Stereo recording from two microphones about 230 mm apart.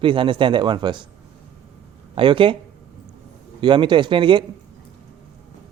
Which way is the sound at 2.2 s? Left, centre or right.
Right.